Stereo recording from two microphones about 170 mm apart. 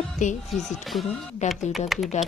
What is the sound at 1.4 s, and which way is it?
Speech, centre (ahead or behind).